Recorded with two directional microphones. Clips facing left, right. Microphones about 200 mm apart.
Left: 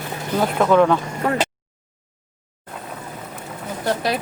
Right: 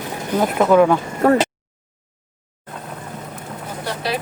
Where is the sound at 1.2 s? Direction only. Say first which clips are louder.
Right 8 dB; 40° right (ahead or behind).